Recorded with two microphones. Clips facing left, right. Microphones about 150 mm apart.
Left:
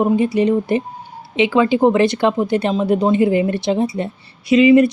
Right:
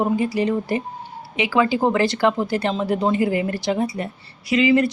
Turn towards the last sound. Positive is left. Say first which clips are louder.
# left 6 dB
turn(degrees=20)  # may be behind; listen again after turning